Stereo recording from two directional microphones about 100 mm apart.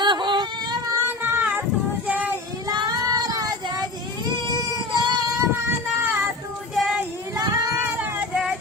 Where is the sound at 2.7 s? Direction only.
40° right (ahead or behind).